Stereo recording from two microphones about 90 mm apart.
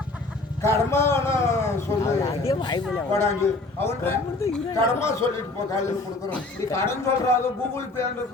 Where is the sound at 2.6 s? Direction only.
55° left (ahead or behind).